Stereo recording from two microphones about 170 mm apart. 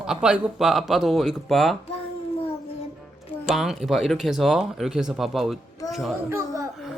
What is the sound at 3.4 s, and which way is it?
Speech, centre (ahead or behind).